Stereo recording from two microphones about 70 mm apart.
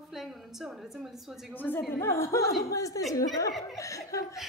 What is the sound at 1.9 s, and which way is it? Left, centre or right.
Speech, left.